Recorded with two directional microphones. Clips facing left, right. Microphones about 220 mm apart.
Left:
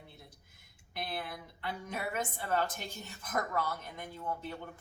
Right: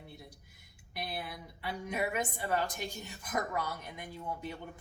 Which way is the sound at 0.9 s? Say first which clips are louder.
Left 1 dB; 10° right (ahead or behind).